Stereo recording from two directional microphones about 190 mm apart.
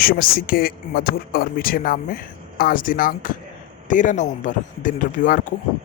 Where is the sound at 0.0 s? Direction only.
50° left (ahead or behind).